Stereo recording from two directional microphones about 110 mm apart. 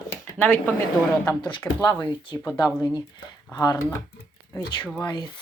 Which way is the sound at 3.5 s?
30° left (ahead or behind).